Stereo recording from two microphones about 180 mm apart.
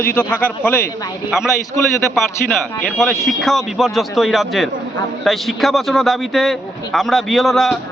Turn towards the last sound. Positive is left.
turn(degrees=0)  # may be behind; listen again after turning